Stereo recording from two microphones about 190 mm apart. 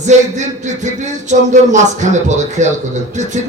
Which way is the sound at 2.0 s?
40° right (ahead or behind).